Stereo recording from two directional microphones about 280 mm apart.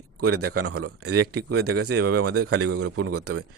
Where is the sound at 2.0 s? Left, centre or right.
Right.